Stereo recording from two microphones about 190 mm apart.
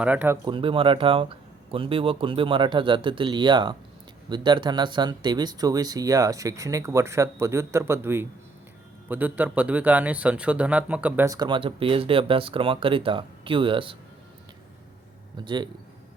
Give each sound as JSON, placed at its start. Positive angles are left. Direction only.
{"t": 0.0, "sound": "speech", "side_deg": -10}
{"t": 0.4, "sound": "speech", "side_deg": -25}
{"t": 11.3, "sound": "speech", "side_deg": -25}
{"t": 15.4, "sound": "speech", "side_deg": -25}